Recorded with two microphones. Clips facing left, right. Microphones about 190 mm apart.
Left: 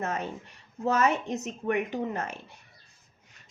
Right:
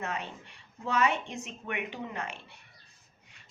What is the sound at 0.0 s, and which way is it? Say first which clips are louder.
Speech: left 5 dB; 40° left (ahead or behind).